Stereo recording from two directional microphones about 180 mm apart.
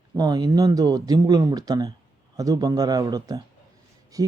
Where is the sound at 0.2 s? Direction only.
20° right (ahead or behind).